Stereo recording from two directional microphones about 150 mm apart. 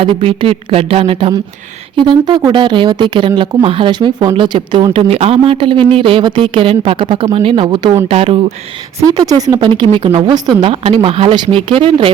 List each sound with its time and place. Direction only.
0.0 s speech: 35° right (ahead or behind)
9.0 s a woman's voice: 25° right (ahead or behind)
10.7 s speech: 40° right (ahead or behind)